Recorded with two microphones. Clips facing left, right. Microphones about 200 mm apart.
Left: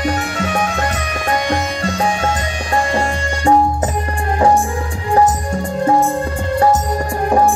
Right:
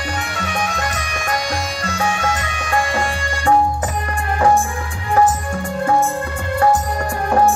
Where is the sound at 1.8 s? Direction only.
30° left (ahead or behind).